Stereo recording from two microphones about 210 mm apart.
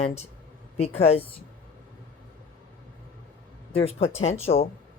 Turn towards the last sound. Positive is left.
turn(degrees=30)  # may be behind; listen again after turning